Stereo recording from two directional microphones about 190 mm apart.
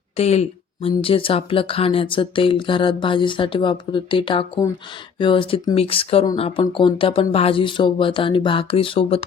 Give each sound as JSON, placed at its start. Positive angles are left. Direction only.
{"t": 0.2, "sound": "speech", "side_deg": 35}